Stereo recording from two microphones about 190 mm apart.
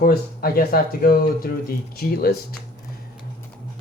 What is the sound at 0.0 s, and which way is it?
Speech, 55° left (ahead or behind).